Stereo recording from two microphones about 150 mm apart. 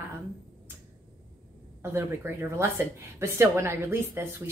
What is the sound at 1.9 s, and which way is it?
A woman's voice, 15° right (ahead or behind).